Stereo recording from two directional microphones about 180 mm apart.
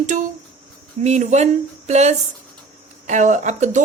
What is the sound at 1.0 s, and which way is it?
A woman's voice, 40° right (ahead or behind).